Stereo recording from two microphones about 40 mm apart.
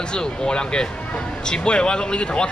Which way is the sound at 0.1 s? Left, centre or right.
Left.